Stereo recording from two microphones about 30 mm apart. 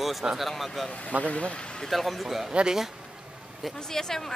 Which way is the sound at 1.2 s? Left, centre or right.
Left.